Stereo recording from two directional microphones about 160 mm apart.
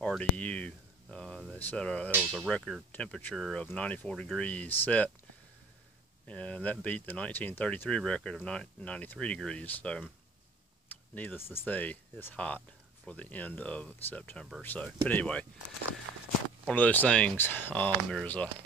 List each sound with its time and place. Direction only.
0.2 s a sound: 10° left (ahead or behind)
2.2 s speech: 5° left (ahead or behind)
6.2 s speech: 10° left (ahead or behind)
16.6 s speech: 10° left (ahead or behind)